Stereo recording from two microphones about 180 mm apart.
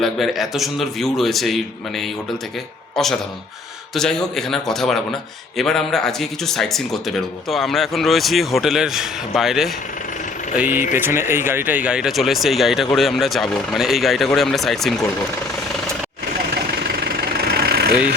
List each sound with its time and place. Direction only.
0.0 s speech: centre (ahead or behind)
16.7 s engine: 60° right (ahead or behind)